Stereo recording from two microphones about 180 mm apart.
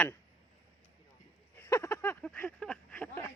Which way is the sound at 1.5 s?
15° left (ahead or behind).